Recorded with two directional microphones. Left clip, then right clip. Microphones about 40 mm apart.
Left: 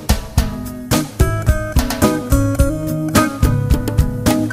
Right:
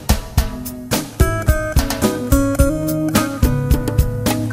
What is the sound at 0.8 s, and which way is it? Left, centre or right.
Music, right.